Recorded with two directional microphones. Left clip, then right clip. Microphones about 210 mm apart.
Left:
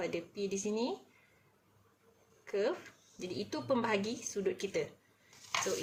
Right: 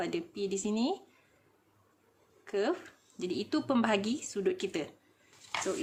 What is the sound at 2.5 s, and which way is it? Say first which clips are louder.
Speech: right 2 dB; 40° right (ahead or behind).